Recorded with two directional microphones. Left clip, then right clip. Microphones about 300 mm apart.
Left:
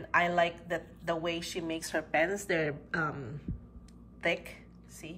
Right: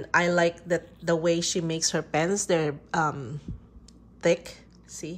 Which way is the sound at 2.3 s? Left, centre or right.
Centre.